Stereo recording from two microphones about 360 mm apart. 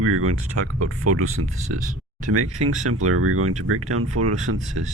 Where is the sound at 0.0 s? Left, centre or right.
Right.